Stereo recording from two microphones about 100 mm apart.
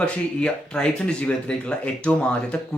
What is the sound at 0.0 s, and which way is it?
Speech, 10° left (ahead or behind).